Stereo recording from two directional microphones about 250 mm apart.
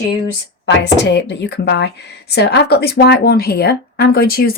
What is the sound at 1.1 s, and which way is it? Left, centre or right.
A woman's voice, left.